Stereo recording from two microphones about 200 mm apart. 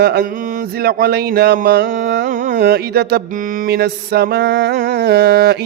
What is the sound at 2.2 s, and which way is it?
Carnatic music, 40° right (ahead or behind).